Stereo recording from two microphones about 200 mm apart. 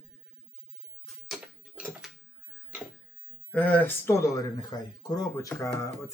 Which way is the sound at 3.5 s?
5° left (ahead or behind).